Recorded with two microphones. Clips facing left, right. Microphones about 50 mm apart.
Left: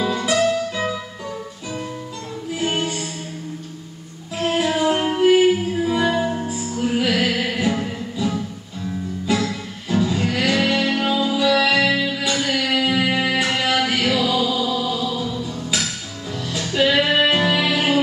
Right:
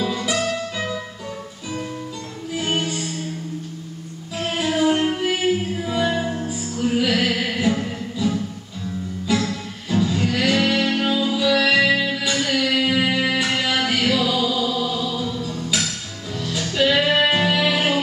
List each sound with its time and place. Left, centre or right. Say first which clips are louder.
0.0 s music: left 4 dB; centre
2.5 s music: left 1 dB; centre
4.4 s music: left 1 dB; centre